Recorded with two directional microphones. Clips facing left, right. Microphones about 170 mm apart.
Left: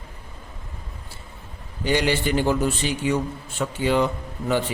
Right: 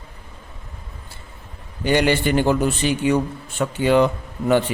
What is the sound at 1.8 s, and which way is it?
A man's voice, 60° right (ahead or behind).